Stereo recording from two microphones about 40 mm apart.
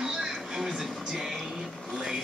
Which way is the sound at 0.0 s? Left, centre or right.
Centre.